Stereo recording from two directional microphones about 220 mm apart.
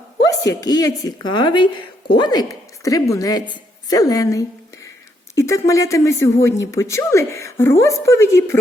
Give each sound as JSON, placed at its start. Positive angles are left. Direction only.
{"t": 0.3, "sound": "speech", "side_deg": 15}